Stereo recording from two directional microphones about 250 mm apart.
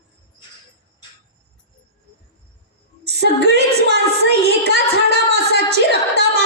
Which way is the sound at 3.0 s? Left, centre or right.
Right.